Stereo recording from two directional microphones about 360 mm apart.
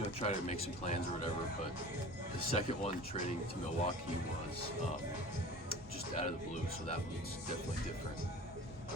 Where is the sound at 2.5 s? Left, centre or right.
Centre.